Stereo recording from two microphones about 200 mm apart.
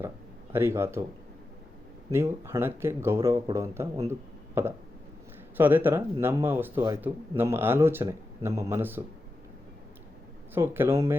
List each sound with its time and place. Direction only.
0.5 s speech: 10° right (ahead or behind)
2.0 s speech: 15° right (ahead or behind)
10.5 s speech: 10° right (ahead or behind)